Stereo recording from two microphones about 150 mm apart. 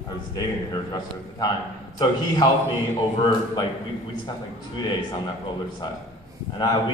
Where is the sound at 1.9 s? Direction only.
30° left (ahead or behind).